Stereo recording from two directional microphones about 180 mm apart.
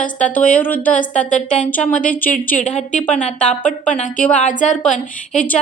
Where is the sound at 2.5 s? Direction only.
40° left (ahead or behind).